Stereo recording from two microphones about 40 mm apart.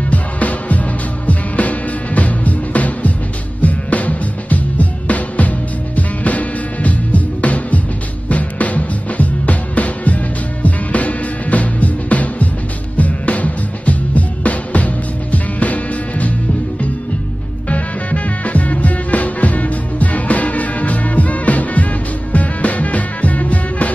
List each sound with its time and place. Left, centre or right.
0.1 s music: left
17.6 s music: left